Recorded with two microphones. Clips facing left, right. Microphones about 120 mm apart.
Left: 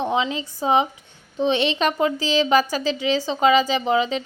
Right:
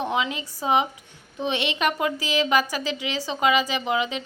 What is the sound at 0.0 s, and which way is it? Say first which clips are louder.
A woman's voice: left 3 dB; 30° left (ahead or behind).